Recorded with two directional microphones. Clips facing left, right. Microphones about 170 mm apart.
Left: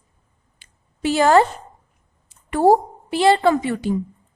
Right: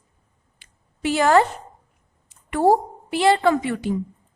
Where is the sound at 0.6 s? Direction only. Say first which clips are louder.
Left 2 dB; 35° left (ahead or behind).